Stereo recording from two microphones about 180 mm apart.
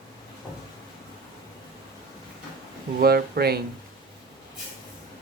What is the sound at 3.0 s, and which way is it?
Speech, 60° right (ahead or behind).